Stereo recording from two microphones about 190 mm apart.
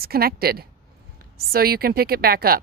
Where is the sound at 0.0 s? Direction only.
55° right (ahead or behind).